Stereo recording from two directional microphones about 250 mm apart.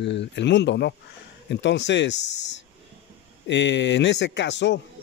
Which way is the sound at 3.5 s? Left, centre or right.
Left.